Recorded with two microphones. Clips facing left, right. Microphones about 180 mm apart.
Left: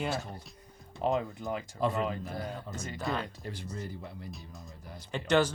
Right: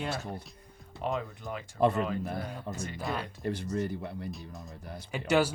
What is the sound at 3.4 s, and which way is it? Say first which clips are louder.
Speech: right 8 dB; 65° right (ahead or behind).